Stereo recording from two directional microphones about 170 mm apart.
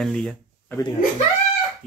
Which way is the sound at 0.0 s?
Centre (ahead or behind).